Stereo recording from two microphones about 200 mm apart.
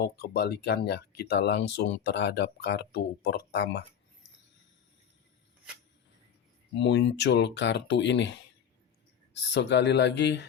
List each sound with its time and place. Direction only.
0.0 s speech: 50° left (ahead or behind)
6.7 s speech: 60° left (ahead or behind)
9.5 s speech: 60° left (ahead or behind)